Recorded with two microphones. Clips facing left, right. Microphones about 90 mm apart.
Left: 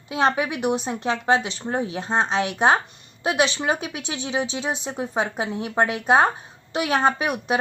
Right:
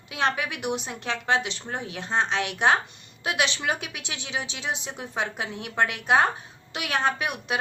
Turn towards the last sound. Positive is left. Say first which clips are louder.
# left 5 dB
turn(degrees=40)  # may be behind; listen again after turning